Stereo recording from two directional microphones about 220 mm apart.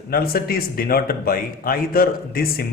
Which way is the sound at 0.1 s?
45° left (ahead or behind).